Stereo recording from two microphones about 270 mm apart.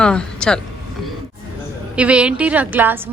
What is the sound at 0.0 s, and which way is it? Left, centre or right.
Speech, centre.